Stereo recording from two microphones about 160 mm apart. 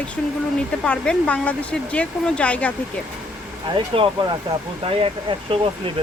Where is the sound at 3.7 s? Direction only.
35° right (ahead or behind).